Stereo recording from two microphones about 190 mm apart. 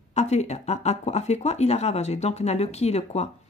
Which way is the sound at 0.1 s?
35° left (ahead or behind).